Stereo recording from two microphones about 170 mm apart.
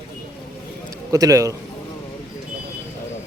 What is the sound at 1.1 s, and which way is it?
Speech, 20° right (ahead or behind).